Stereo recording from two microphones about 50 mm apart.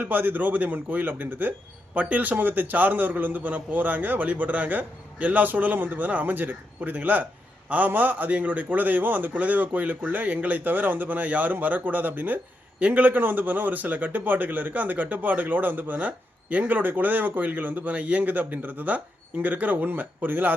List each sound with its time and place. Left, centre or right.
0.0 s a man's voice: right